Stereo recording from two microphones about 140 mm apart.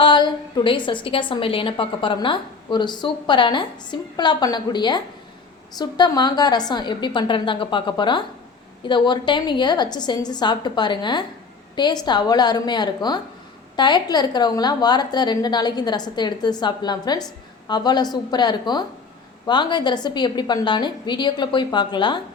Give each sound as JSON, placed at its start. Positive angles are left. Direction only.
{"t": 0.0, "sound": "a woman's voice", "side_deg": 35}